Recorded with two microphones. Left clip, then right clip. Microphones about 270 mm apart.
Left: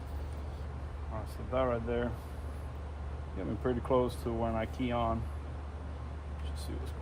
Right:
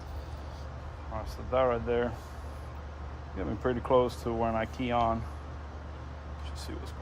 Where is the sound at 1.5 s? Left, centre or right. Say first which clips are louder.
Right 5 dB; right.